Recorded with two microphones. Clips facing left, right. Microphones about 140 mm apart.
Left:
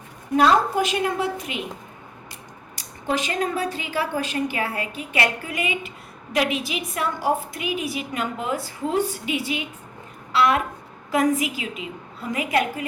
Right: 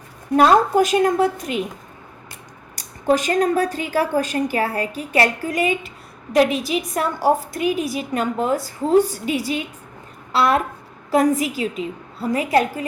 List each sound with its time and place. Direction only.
0.3 s a woman's voice: 45° right (ahead or behind)
2.7 s a woman's voice: 45° right (ahead or behind)